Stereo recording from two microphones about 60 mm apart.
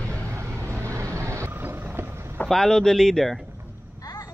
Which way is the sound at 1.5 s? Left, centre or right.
Right.